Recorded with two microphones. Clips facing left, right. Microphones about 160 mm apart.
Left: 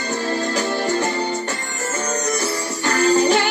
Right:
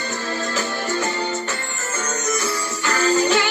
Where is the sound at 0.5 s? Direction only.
40° left (ahead or behind).